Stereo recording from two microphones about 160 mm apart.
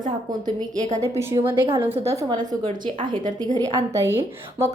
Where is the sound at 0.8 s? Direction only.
50° right (ahead or behind).